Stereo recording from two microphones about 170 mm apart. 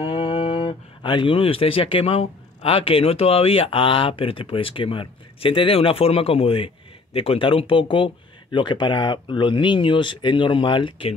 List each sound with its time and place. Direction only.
0.0 s speech: 30° left (ahead or behind)